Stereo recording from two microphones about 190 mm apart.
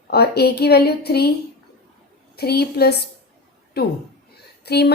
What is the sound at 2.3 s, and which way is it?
A woman's voice, 55° left (ahead or behind).